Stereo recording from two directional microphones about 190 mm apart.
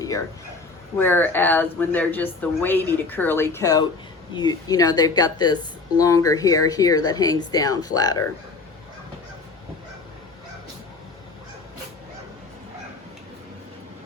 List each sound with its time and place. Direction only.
0.9 s a woman's voice: 10° left (ahead or behind)